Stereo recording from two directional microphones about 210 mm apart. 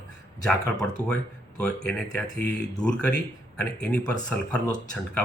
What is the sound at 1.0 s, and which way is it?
Speech, 10° right (ahead or behind).